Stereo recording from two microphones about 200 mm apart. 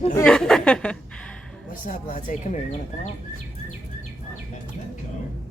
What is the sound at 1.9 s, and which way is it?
Speech, 40° left (ahead or behind).